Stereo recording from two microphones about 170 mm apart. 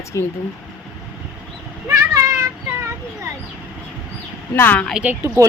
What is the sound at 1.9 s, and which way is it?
Child singing, 15° right (ahead or behind).